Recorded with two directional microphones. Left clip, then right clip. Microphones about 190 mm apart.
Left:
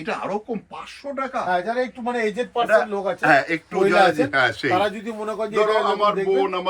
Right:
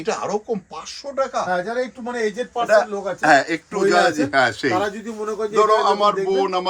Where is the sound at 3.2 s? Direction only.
60° right (ahead or behind).